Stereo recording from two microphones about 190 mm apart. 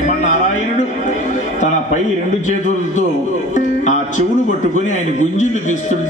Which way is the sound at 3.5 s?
40° left (ahead or behind).